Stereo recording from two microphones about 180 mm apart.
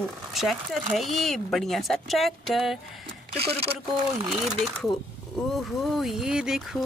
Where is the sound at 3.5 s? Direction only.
30° right (ahead or behind).